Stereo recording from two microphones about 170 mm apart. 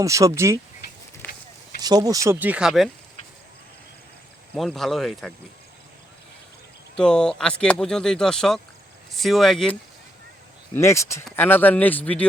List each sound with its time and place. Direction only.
0.0 s speech: 20° right (ahead or behind)
1.2 s a sound: 10° left (ahead or behind)
1.8 s speech: 25° right (ahead or behind); by 2.9 s centre (ahead or behind)
4.5 s speech: centre (ahead or behind)
6.9 s speech: 5° left (ahead or behind)
10.8 s speech: 15° left (ahead or behind)